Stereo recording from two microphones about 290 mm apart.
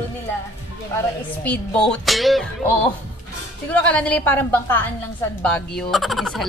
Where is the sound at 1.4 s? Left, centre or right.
Centre.